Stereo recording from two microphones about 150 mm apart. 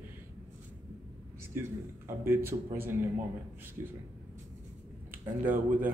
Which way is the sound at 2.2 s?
15° right (ahead or behind).